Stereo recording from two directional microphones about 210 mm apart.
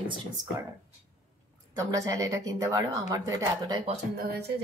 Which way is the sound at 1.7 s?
15° right (ahead or behind).